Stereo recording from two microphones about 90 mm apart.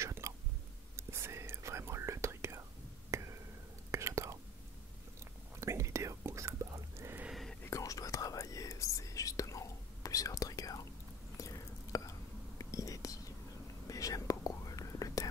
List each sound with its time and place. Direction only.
0.0 s chewing: 35° right (ahead or behind)
0.9 s whispering: 30° right (ahead or behind)
5.6 s whispering: 35° right (ahead or behind)
7.2 s whispering: centre (ahead or behind)
7.6 s whispering: 35° left (ahead or behind)